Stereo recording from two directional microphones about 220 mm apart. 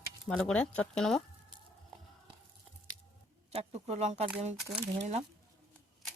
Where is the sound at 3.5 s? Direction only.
30° right (ahead or behind).